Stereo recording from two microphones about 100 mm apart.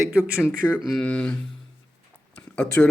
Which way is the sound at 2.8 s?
15° left (ahead or behind).